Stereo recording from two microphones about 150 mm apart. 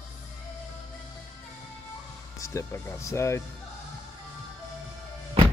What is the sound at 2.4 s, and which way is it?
Speech, 20° left (ahead or behind).